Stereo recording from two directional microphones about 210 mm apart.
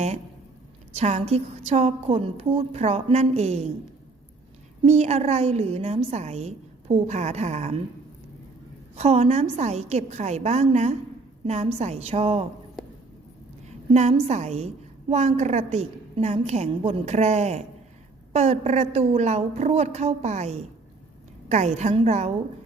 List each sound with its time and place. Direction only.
0.9 s a woman's voice: 30° right (ahead or behind)
4.8 s a woman's voice: 30° right (ahead or behind)
9.0 s a woman's voice: 30° right (ahead or behind)
13.7 s a woman's voice: 30° right (ahead or behind)